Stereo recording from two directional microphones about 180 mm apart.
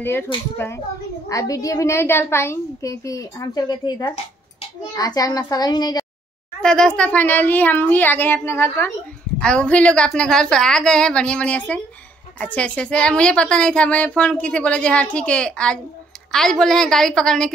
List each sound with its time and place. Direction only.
0.6 s a woman's voice: 15° left (ahead or behind)
6.6 s a woman's voice: 5° left (ahead or behind)